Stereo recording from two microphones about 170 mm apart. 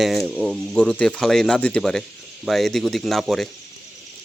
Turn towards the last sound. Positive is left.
turn(degrees=0)  # may be behind; listen again after turning